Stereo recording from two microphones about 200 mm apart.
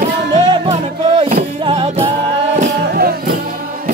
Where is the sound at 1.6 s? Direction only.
30° right (ahead or behind).